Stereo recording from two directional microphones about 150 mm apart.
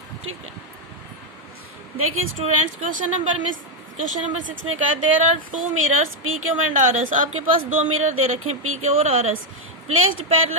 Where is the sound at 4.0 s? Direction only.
60° right (ahead or behind).